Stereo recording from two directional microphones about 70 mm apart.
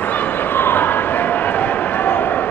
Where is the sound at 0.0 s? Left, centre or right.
Left.